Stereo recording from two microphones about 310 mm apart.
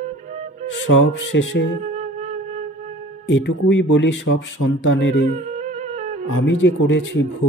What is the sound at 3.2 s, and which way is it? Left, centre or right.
Speech, left.